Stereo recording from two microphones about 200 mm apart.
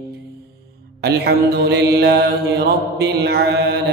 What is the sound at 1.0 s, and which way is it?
Mantra, 55° right (ahead or behind).